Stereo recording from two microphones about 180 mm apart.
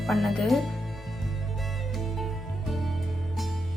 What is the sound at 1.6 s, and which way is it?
Music, centre (ahead or behind).